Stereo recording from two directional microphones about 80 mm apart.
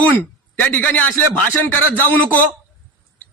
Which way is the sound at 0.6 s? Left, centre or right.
Centre.